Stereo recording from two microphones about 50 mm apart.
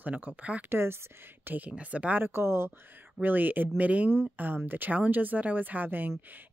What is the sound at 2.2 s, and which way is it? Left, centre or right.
Speech, right.